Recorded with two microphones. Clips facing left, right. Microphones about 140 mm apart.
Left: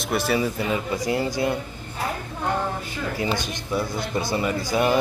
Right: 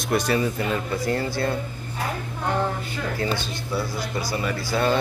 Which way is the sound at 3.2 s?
15° left (ahead or behind).